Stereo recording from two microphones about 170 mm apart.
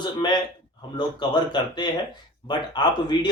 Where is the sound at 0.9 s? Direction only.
25° left (ahead or behind).